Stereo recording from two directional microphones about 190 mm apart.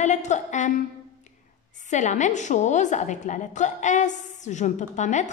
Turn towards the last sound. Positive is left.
turn(degrees=40)  # may be behind; listen again after turning